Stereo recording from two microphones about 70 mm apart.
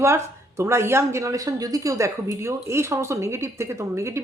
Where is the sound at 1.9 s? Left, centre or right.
Right.